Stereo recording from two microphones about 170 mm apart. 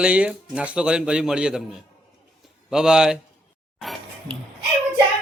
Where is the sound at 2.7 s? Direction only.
5° right (ahead or behind).